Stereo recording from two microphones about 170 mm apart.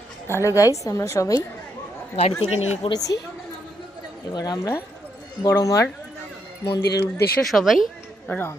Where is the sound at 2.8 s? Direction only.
20° left (ahead or behind).